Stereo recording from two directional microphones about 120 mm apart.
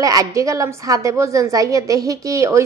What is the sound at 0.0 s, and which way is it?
A woman's voice, 30° right (ahead or behind).